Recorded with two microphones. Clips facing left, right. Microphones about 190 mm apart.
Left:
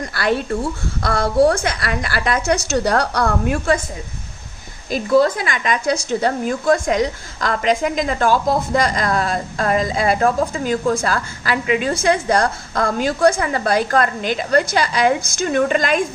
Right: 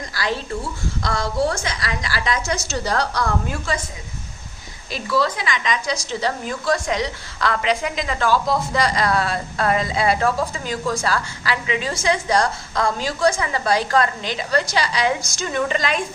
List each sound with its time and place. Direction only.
0.1 s a woman's voice: 60° left (ahead or behind)
4.9 s a woman's voice: 45° left (ahead or behind)